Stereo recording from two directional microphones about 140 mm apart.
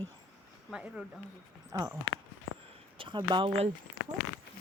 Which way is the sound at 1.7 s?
25° right (ahead or behind).